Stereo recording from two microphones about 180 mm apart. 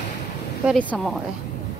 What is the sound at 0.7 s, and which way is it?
Speech, 5° left (ahead or behind).